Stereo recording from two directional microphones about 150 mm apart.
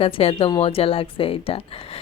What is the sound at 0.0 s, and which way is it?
A woman's voice, 40° left (ahead or behind).